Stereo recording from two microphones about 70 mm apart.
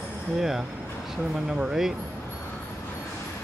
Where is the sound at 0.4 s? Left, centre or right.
Centre.